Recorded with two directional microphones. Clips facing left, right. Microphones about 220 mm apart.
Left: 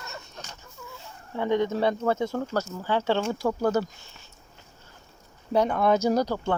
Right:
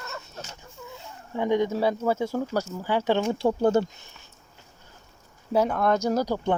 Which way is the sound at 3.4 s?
25° right (ahead or behind).